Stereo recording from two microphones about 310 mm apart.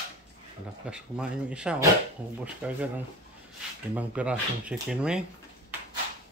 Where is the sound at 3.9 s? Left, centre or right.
Centre.